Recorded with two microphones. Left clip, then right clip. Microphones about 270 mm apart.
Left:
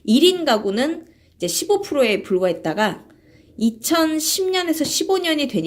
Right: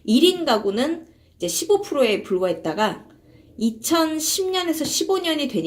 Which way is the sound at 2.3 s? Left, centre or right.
Left.